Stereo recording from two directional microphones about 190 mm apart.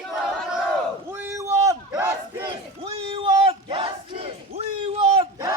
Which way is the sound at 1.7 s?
15° right (ahead or behind).